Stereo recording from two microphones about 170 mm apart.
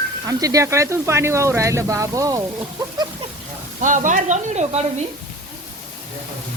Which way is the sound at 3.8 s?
50° right (ahead or behind).